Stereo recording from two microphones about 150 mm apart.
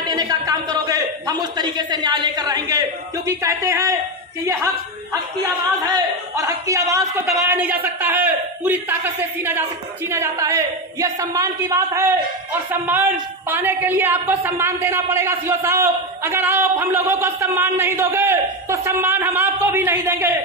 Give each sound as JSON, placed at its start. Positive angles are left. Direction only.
{"t": 0.0, "sound": "a man's voice", "side_deg": -25}
{"t": 5.8, "sound": "a man's voice", "side_deg": -25}